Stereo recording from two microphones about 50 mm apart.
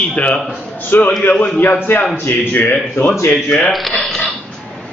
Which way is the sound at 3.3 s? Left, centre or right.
Left.